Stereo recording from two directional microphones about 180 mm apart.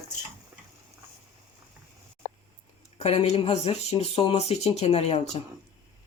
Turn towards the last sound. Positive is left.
turn(degrees=35)  # may be behind; listen again after turning